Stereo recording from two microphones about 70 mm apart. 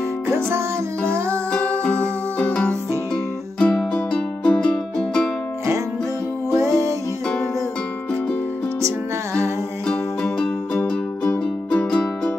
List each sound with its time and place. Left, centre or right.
0.3 s music: right
1.5 s music: centre
6.5 s music: right
8.8 s music: right
9.8 s music: centre